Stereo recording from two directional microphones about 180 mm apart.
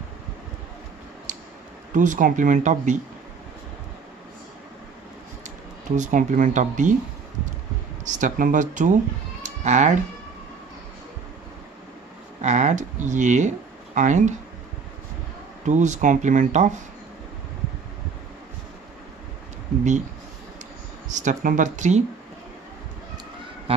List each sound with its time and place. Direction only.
1.3 s a sound: 45° right (ahead or behind)
2.0 s speech: 45° right (ahead or behind)
5.9 s speech: 45° right (ahead or behind)
8.1 s speech: 45° right (ahead or behind)
9.4 s a sound: 40° right (ahead or behind)
12.4 s speech: 40° right (ahead or behind)
15.6 s speech: 40° right (ahead or behind)
21.1 s speech: 45° right (ahead or behind)